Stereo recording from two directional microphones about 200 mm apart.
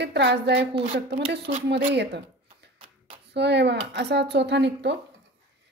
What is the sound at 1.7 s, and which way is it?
Speech, 55° right (ahead or behind).